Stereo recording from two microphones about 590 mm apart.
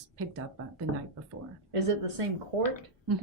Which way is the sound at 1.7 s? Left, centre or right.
Right.